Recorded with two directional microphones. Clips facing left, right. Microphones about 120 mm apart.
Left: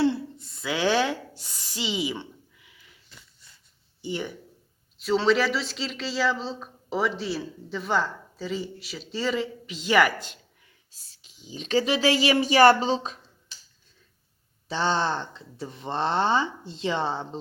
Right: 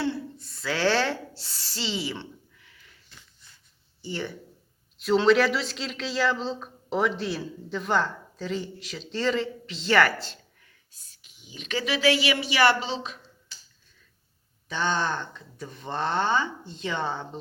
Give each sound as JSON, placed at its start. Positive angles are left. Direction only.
{"t": 0.0, "sound": "a sound", "side_deg": 25}
{"t": 1.4, "sound": "rub", "side_deg": 15}
{"t": 4.0, "sound": "speech", "side_deg": 15}
{"t": 4.9, "sound": "speech", "side_deg": 0}
{"t": 11.2, "sound": "speech", "side_deg": 30}
{"t": 14.7, "sound": "speech", "side_deg": 30}